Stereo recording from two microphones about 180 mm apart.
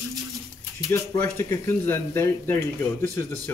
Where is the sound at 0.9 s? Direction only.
15° left (ahead or behind).